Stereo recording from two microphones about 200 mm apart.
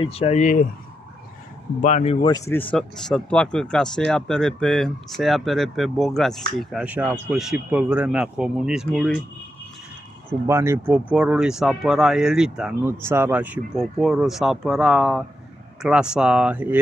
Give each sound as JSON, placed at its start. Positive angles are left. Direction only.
{"t": 0.0, "sound": "speech", "side_deg": 30}
{"t": 1.8, "sound": "speech", "side_deg": 35}
{"t": 2.2, "sound": "speech", "side_deg": 15}
{"t": 10.4, "sound": "speech", "side_deg": -10}